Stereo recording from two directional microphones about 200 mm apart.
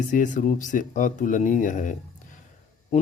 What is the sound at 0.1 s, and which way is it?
Speech, 40° left (ahead or behind).